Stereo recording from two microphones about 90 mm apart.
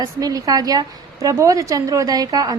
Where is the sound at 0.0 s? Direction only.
45° right (ahead or behind).